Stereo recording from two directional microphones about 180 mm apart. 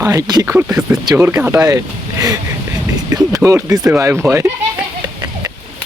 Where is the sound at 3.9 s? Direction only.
15° right (ahead or behind).